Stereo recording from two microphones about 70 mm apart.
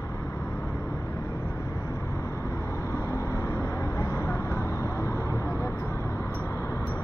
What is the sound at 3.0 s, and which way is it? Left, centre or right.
Vehicle, left.